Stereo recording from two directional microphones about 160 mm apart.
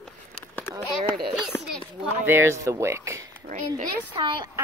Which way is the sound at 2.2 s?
15° right (ahead or behind).